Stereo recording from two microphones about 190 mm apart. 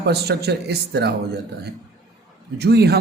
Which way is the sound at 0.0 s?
60° right (ahead or behind).